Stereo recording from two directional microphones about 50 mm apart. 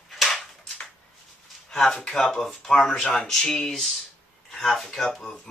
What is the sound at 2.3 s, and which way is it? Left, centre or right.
Speech, centre.